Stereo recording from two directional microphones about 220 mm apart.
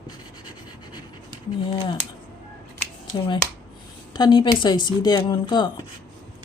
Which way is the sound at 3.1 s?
25° left (ahead or behind).